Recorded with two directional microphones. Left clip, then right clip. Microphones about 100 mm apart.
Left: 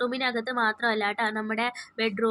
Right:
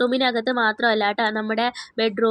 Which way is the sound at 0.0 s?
35° right (ahead or behind).